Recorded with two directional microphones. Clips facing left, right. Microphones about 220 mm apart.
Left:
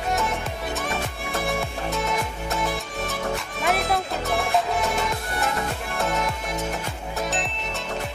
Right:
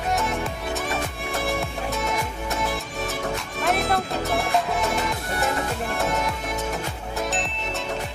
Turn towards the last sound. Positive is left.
turn(degrees=0)  # may be behind; listen again after turning